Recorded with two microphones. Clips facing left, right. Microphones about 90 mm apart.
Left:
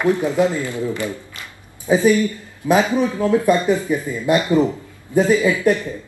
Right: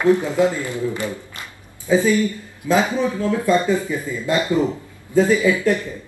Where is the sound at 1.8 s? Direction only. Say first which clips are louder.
Left 2 dB; 20° left (ahead or behind).